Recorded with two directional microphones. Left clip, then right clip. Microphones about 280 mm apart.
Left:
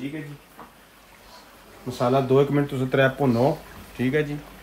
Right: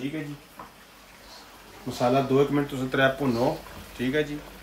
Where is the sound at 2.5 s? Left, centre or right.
Left.